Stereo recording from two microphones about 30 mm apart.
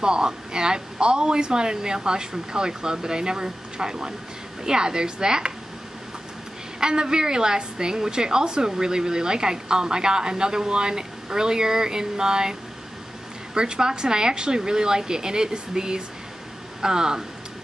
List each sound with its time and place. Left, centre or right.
0.0 s a woman's voice: right
6.8 s a woman's voice: right
13.6 s a woman's voice: right